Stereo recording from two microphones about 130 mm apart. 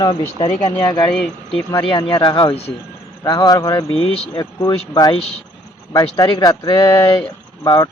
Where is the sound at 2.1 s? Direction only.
35° left (ahead or behind).